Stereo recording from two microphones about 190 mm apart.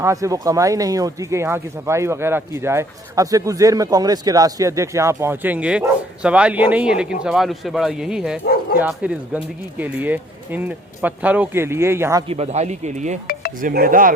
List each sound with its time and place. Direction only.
0.0 s speech: 15° right (ahead or behind)
12.3 s speech: 35° right (ahead or behind)